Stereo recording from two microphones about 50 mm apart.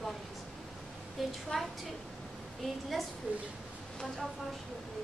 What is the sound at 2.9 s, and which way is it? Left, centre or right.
Speech, centre.